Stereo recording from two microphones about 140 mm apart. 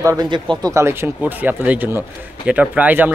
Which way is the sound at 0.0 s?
25° right (ahead or behind).